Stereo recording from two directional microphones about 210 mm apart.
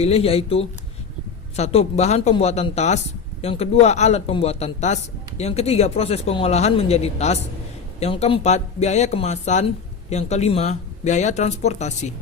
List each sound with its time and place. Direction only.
0.0 s speech: 30° left (ahead or behind)